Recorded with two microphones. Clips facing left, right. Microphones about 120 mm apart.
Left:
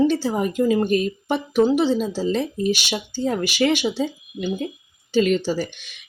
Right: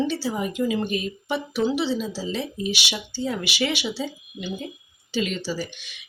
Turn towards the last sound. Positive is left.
turn(degrees=50)  # may be behind; listen again after turning